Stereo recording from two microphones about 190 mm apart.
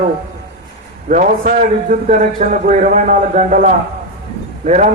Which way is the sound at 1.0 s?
45° right (ahead or behind).